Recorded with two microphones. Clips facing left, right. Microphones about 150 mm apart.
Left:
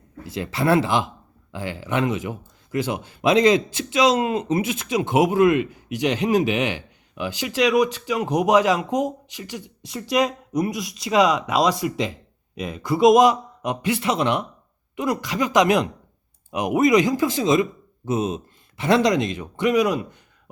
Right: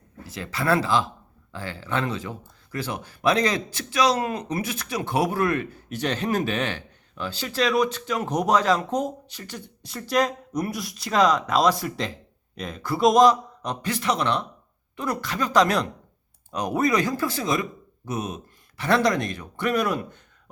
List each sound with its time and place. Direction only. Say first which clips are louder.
0.3 s speech: left 4 dB; 25° left (ahead or behind); by 13.2 s centre (ahead or behind)
13.8 s speech: left 3 dB; 25° left (ahead or behind)